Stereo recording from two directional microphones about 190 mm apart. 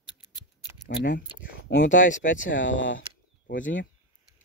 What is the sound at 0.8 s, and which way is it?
Speech, 45° left (ahead or behind).